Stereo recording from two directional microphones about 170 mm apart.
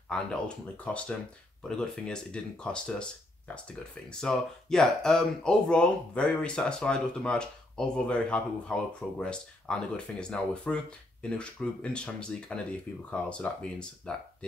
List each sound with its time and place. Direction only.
0.1 s speech: 5° left (ahead or behind)